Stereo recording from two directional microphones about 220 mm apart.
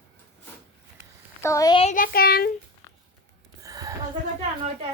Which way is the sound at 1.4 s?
15° left (ahead or behind).